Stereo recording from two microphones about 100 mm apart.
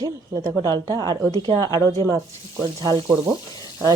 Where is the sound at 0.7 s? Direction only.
40° right (ahead or behind).